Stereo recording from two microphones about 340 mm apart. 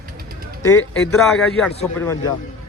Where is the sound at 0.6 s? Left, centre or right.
Centre.